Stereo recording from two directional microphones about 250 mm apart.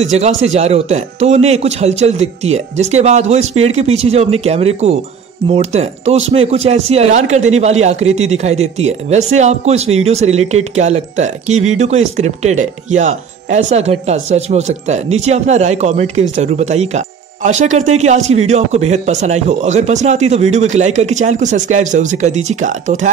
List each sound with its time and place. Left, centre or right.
0.0 s speech: right